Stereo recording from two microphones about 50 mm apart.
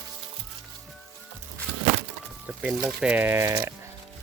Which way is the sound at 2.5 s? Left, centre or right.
Right.